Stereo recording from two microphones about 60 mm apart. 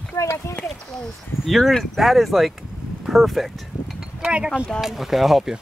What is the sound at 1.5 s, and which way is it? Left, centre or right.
Speech, centre.